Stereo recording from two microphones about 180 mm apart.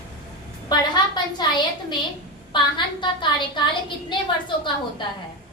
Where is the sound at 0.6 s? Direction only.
25° left (ahead or behind).